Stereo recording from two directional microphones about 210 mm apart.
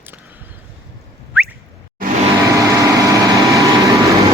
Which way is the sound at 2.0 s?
40° right (ahead or behind).